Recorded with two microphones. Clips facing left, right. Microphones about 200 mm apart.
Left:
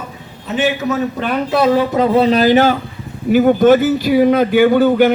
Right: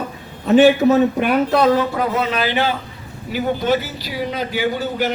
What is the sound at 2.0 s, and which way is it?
A man's voice, 35° left (ahead or behind).